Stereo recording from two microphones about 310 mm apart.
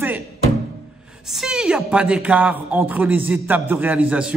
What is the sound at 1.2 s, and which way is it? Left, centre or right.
A man's voice, centre.